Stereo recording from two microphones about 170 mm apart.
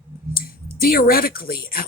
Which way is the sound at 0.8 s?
60° left (ahead or behind).